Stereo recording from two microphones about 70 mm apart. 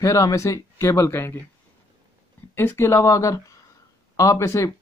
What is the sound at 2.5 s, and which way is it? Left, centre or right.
Speech, left.